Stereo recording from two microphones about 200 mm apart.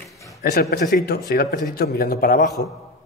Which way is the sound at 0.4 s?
50° left (ahead or behind).